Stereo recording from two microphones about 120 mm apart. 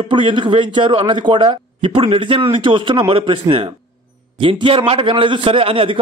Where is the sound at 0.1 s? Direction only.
45° right (ahead or behind).